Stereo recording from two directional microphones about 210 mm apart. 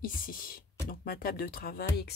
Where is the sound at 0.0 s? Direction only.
40° left (ahead or behind).